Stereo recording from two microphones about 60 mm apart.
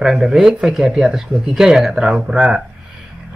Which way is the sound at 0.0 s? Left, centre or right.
Centre.